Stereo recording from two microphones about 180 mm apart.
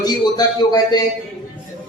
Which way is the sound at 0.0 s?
20° left (ahead or behind).